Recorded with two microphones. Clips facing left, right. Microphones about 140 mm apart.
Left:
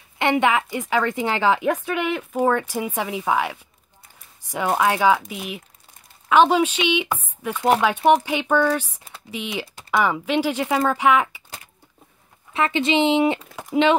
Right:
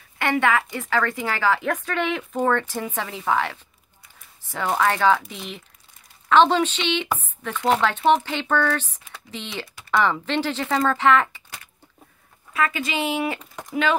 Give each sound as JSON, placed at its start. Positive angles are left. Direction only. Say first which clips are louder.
{"t": 0.2, "sound": "a woman's voice", "louder": "left 2 dB", "side_deg": 20}
{"t": 12.5, "sound": "speech", "louder": "left 5 dB", "side_deg": 25}